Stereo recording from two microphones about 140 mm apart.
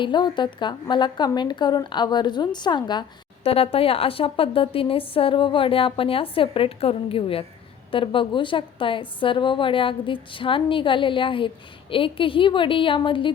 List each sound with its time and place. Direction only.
0.0 s a woman's voice: 35° left (ahead or behind)
3.4 s a woman's voice: 45° left (ahead or behind)